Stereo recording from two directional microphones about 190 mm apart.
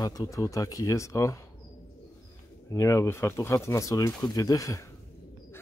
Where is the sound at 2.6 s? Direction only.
15° left (ahead or behind).